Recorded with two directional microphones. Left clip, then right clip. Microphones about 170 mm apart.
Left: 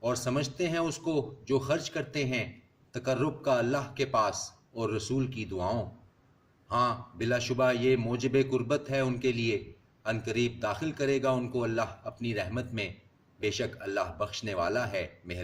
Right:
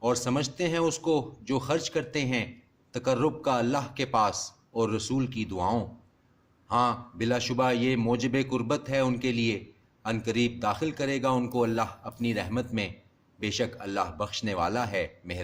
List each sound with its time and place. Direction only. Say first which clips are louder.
0.0 s a man's voice: right 3 dB; 45° right (ahead or behind)